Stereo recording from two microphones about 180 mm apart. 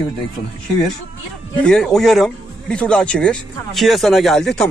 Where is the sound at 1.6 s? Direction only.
5° left (ahead or behind).